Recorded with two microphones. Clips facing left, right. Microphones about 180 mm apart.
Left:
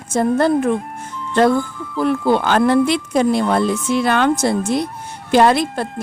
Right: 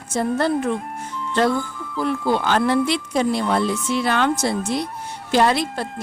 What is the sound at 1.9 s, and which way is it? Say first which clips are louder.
Speech: left 5 dB; 55° left (ahead or behind).